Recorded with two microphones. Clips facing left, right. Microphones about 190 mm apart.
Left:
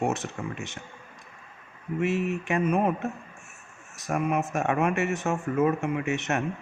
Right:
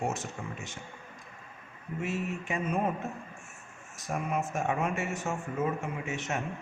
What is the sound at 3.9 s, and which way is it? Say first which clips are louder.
A man's voice: left 6 dB; 65° left (ahead or behind).